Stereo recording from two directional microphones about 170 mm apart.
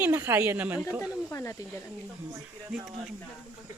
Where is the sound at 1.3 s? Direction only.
15° left (ahead or behind).